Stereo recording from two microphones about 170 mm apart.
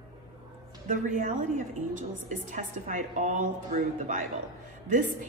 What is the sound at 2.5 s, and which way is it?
A woman's voice, 50° right (ahead or behind).